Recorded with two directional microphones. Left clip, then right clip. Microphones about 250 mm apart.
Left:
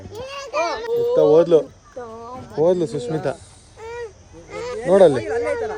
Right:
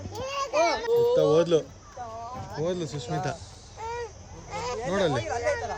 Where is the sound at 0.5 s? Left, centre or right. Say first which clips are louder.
Left 2 dB; right.